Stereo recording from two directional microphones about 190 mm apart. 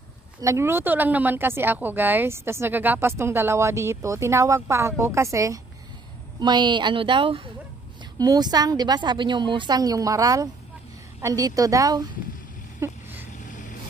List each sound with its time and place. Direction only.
0.4 s a woman's voice: 15° right (ahead or behind)
12.8 s a sound: 10° right (ahead or behind)
13.5 s vehicle: 40° left (ahead or behind)